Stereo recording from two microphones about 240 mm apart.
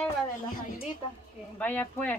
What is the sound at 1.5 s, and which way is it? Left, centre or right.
Speech, centre.